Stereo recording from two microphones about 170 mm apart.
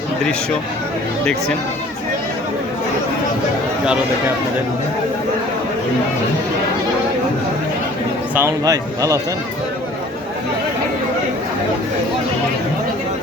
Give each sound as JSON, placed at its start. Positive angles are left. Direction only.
{"t": 1.2, "sound": "speech", "side_deg": 5}
{"t": 8.4, "sound": "a man's voice", "side_deg": -20}